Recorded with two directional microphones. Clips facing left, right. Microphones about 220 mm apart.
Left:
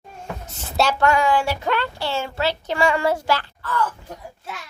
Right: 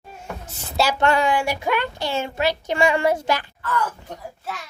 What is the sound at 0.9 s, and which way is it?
Speech, 25° right (ahead or behind).